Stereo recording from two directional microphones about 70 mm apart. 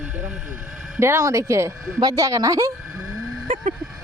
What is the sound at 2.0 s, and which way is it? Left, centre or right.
Speech, right.